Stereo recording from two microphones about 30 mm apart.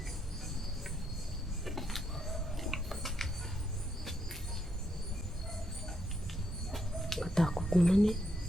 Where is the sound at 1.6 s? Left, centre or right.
Centre.